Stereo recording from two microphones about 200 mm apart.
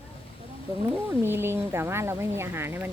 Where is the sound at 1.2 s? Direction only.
10° right (ahead or behind).